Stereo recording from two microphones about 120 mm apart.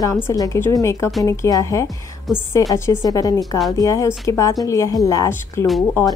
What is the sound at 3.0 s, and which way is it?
A woman's voice, 30° left (ahead or behind).